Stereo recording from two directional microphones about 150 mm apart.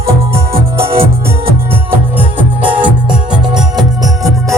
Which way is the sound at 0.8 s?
40° right (ahead or behind).